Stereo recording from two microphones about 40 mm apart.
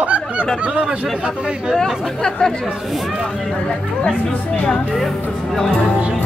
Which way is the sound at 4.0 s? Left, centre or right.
Left.